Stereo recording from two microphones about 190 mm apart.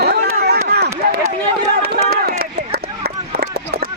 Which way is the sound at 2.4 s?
55° right (ahead or behind).